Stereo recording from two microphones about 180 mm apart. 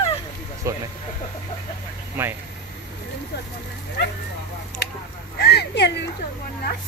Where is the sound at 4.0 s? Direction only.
65° left (ahead or behind).